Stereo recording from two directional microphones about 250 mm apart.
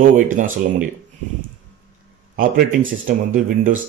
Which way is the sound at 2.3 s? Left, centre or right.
Right.